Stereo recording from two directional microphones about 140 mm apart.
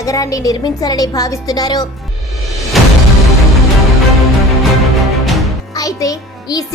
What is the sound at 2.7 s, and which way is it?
Music, centre (ahead or behind).